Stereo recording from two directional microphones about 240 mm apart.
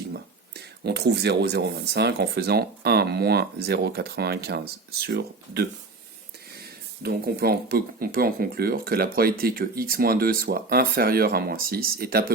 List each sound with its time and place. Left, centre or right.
0.1 s speech: right
7.0 s speech: right